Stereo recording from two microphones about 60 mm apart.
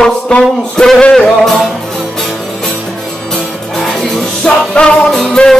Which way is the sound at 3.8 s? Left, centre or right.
Centre.